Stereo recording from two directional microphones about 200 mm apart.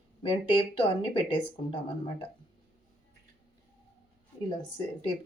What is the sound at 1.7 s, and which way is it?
Speech, 25° left (ahead or behind).